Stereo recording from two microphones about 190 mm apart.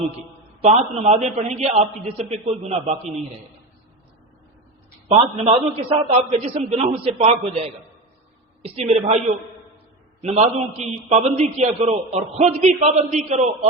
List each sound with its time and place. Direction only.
0.6 s a man's voice: 35° right (ahead or behind)
5.0 s a man's voice: 30° right (ahead or behind)